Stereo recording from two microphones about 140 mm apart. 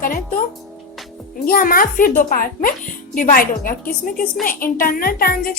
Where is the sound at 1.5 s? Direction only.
90° left.